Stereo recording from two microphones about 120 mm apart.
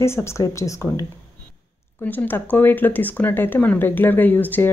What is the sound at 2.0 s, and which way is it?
Speech, 15° left (ahead or behind).